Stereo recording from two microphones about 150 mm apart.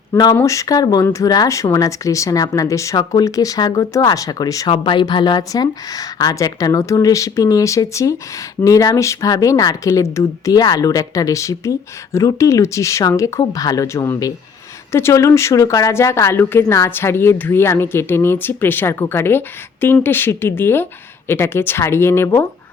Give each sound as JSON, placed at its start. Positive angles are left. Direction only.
{"t": 0.3, "sound": "a woman's voice", "side_deg": 20}